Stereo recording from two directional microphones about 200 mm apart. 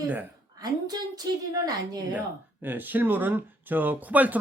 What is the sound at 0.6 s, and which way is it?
Speech, 20° right (ahead or behind).